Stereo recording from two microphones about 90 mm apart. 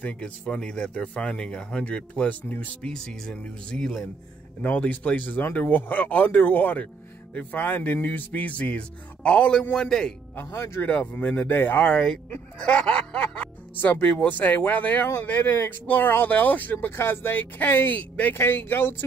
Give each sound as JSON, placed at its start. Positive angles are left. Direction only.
{"t": 0.0, "sound": "speech", "side_deg": 15}
{"t": 4.6, "sound": "speech", "side_deg": 15}
{"t": 10.3, "sound": "speech", "side_deg": 25}
{"t": 10.9, "sound": "speech", "side_deg": 15}
{"t": 11.9, "sound": "speech", "side_deg": 10}
{"t": 12.5, "sound": "music", "side_deg": 10}
{"t": 13.7, "sound": "speech", "side_deg": 20}